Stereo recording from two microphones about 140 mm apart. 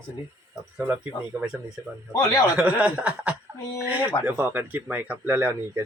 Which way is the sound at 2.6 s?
10° right (ahead or behind).